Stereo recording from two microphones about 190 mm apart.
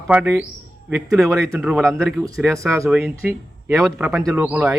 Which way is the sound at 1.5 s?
10° right (ahead or behind).